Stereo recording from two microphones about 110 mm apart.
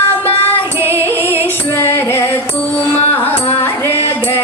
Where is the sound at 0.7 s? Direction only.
20° right (ahead or behind).